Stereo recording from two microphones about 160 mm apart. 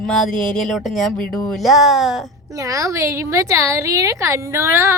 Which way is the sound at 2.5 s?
20° right (ahead or behind).